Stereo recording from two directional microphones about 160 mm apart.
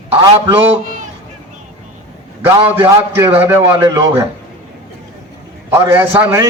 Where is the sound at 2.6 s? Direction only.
10° right (ahead or behind).